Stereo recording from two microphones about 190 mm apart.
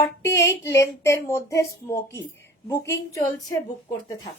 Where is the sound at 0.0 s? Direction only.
15° left (ahead or behind).